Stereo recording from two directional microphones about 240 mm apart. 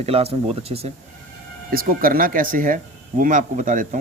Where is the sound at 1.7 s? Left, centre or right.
Right.